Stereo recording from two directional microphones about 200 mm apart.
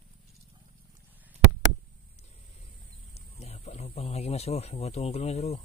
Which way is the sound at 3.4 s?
30° left (ahead or behind).